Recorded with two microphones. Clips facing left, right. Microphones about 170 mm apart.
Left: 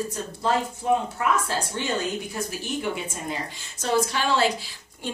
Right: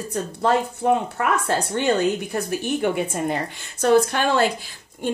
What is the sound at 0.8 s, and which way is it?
Speech, 65° right (ahead or behind).